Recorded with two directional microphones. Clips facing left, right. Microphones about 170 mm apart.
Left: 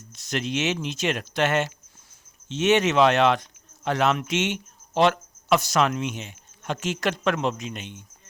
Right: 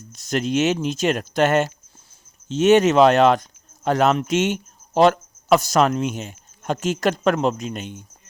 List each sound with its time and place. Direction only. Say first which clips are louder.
0.1 s speech: right 6 dB; 45° right (ahead or behind)